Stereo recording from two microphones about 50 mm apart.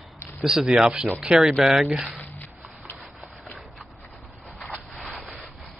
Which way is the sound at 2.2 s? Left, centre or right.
Left.